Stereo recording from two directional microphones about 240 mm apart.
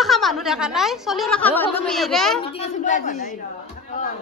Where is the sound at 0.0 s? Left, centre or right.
Centre.